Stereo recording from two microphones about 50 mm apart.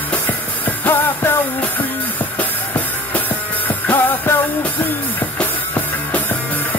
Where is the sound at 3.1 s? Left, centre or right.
Left.